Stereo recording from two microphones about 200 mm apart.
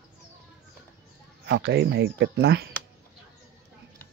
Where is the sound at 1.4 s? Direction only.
55° right (ahead or behind).